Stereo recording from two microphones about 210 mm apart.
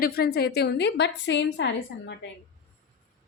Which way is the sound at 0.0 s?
45° left (ahead or behind).